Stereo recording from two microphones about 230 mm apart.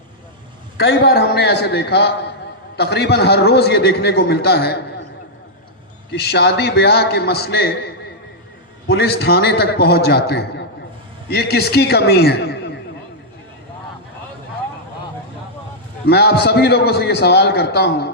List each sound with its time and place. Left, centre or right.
0.8 s a man's voice: left
6.1 s a man's voice: left
8.9 s a man's voice: left
16.0 s a man's voice: left